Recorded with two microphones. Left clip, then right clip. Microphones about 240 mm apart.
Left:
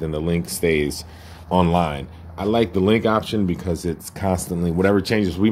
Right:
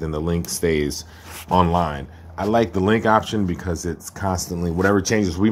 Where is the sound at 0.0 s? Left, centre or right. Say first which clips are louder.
Left 1 dB; centre.